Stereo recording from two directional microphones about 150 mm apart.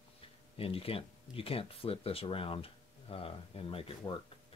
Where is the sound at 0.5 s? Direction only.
40° left (ahead or behind).